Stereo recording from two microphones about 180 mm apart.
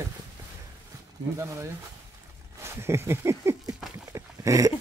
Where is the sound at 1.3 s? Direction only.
15° right (ahead or behind).